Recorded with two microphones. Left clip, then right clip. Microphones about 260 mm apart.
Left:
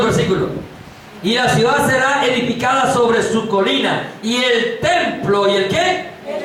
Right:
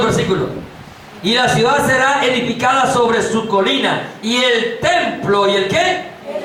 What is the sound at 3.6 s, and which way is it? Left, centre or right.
A man's voice, centre.